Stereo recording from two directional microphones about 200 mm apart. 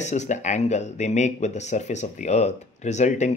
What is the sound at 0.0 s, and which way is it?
Speech, 35° left (ahead or behind).